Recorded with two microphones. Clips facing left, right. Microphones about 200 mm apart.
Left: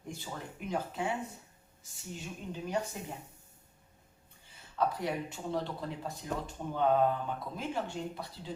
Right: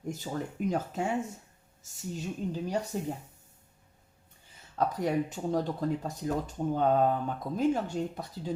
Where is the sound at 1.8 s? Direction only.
40° right (ahead or behind).